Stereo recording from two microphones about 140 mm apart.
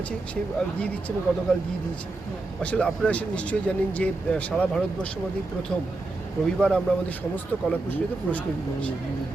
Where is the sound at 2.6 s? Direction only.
10° left (ahead or behind).